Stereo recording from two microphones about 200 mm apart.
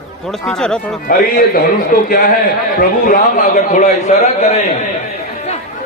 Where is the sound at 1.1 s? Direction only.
45° left (ahead or behind).